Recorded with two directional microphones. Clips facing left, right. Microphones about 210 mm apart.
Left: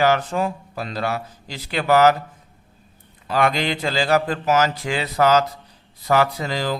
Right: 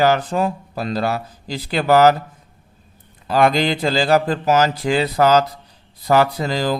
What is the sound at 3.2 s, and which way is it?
A man's voice, 35° right (ahead or behind).